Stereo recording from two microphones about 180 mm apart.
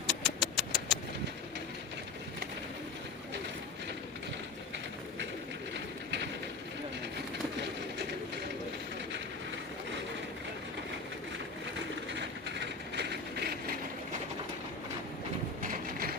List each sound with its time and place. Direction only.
0.1 s vehicle: 5° left (ahead or behind)
5.7 s a sound: 75° right (ahead or behind)
12.1 s ratchet: 75° right (ahead or behind)